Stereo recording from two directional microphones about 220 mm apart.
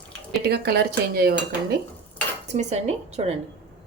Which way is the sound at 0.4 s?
45° right (ahead or behind).